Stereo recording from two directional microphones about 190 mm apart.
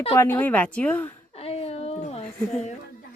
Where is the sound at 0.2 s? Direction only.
10° left (ahead or behind).